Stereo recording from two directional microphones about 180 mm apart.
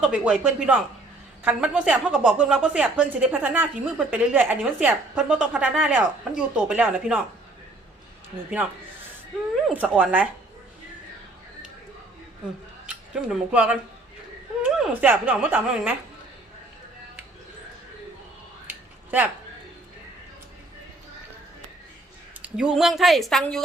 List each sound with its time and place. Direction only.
0.0 s a woman's voice: 5° right (ahead or behind)
9.6 s a woman's voice: 5° right (ahead or behind)
12.9 s a woman's voice: 5° right (ahead or behind)
18.7 s a sound: 10° right (ahead or behind)
22.4 s a woman's voice: 5° right (ahead or behind)